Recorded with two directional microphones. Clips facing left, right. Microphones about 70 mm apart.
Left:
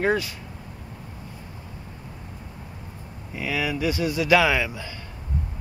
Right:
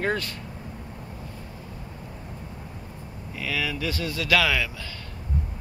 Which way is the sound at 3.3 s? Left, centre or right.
Centre.